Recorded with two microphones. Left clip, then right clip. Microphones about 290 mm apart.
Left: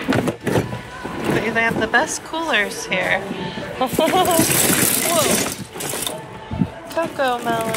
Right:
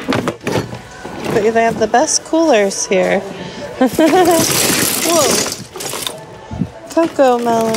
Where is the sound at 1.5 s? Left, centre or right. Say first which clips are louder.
Right 5 dB; right.